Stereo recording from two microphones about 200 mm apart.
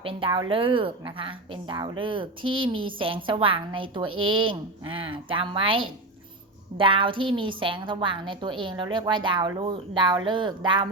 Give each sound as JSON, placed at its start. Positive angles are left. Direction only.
{"t": 0.0, "sound": "a woman's voice", "side_deg": -25}